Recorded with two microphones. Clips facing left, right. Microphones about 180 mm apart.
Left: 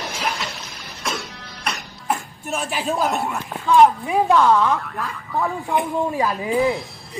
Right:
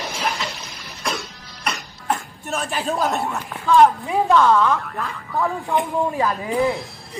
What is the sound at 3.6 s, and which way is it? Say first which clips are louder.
Speech: even; 15° left (ahead or behind).